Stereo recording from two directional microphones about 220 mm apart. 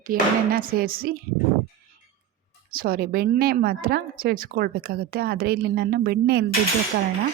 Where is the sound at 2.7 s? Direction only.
40° right (ahead or behind).